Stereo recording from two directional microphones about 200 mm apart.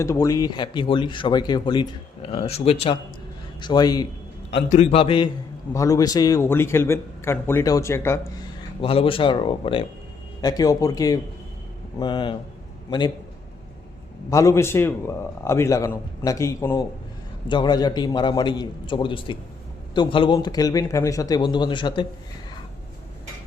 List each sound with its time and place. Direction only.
0.0 s speech: 15° left (ahead or behind)
4.7 s a man's voice: 30° left (ahead or behind); by 8.3 s 15° left (ahead or behind)
8.8 s a man's voice: 25° left (ahead or behind)
14.3 s a man's voice: 15° left (ahead or behind)